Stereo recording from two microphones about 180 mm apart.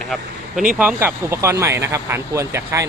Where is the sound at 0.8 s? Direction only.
10° right (ahead or behind).